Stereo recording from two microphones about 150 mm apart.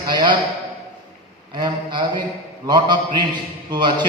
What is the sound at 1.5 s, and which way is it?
A man's voice, 30° right (ahead or behind).